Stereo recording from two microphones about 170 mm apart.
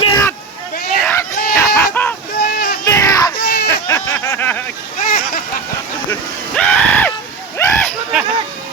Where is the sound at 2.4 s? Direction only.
70° left (ahead or behind).